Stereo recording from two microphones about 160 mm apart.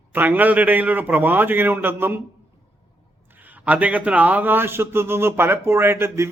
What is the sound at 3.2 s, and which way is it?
A man's voice, 10° right (ahead or behind).